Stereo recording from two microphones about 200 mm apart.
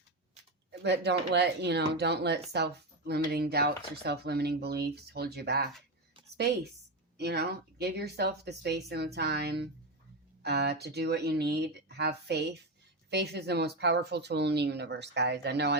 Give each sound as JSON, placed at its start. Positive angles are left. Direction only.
{"t": 0.7, "sound": "a woman's voice", "side_deg": -60}